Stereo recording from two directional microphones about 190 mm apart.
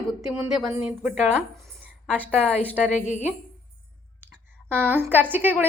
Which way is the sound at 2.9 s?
40° left (ahead or behind).